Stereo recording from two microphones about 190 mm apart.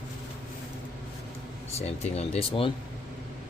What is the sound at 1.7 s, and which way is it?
Speech, 35° left (ahead or behind).